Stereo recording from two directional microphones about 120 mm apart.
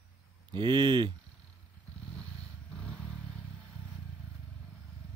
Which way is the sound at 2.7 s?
5° left (ahead or behind).